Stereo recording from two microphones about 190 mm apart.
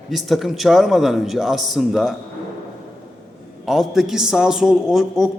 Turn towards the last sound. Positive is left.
turn(degrees=0)  # may be behind; listen again after turning